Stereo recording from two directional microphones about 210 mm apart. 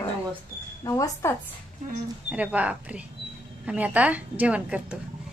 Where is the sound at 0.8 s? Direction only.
15° left (ahead or behind).